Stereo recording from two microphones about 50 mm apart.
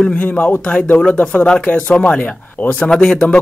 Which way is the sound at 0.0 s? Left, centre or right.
Left.